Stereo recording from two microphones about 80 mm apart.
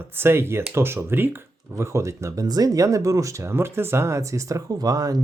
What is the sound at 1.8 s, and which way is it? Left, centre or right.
Speech, right.